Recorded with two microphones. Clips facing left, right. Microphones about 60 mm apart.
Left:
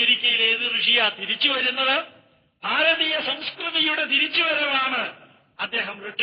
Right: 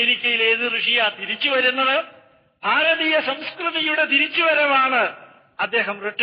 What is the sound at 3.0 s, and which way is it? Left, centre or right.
Speech, right.